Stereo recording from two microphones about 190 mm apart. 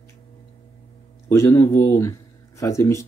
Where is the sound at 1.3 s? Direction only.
15° left (ahead or behind).